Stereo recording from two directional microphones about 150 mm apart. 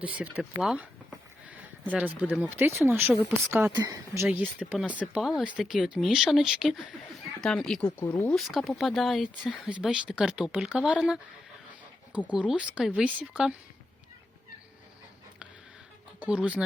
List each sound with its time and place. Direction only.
0.0 s speech: 5° right (ahead or behind)
5.2 s speech: centre (ahead or behind)
12.3 s speech: 5° right (ahead or behind)
16.2 s speech: 5° right (ahead or behind)